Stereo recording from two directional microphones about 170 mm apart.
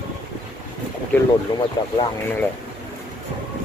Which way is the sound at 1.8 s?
25° left (ahead or behind).